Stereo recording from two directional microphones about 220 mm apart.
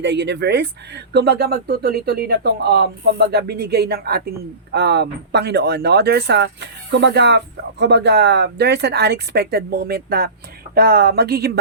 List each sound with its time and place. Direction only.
0.0 s speech: 50° right (ahead or behind)